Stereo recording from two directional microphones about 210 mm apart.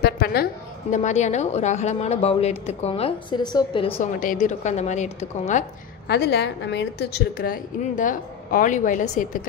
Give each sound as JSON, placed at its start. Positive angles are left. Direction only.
{"t": 0.0, "sound": "a sound", "side_deg": 50}
{"t": 0.9, "sound": "a woman's voice", "side_deg": 35}
{"t": 4.0, "sound": "a woman's voice", "side_deg": 40}
{"t": 6.0, "sound": "a woman's voice", "side_deg": 50}